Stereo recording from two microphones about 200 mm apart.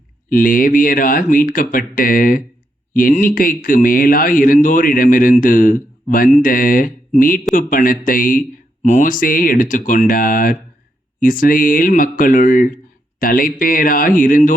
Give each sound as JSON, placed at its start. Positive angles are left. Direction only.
{"t": 0.3, "sound": "speech", "side_deg": 45}